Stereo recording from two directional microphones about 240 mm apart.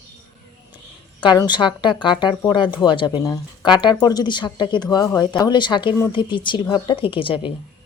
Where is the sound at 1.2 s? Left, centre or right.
Centre.